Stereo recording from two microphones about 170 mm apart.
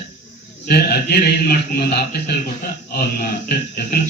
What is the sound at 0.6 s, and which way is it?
A man's voice, 70° left (ahead or behind).